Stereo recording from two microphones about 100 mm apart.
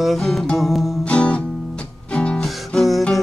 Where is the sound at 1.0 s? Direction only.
10° left (ahead or behind).